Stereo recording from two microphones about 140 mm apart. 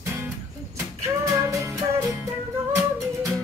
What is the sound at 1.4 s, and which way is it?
Music, 20° right (ahead or behind).